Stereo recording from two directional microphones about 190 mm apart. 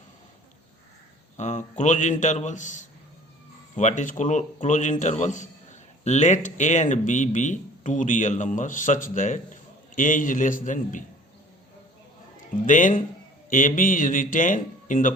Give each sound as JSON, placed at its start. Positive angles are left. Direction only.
{"t": 1.4, "sound": "speech", "side_deg": 40}
{"t": 12.6, "sound": "speech", "side_deg": 45}